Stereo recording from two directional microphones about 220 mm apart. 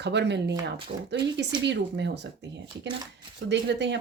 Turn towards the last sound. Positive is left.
turn(degrees=-50)  # may be behind; listen again after turning